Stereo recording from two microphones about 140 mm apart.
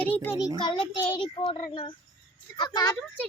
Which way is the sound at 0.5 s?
35° left (ahead or behind).